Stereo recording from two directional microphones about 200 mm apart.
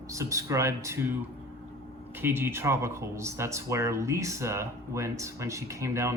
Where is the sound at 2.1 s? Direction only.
10° right (ahead or behind).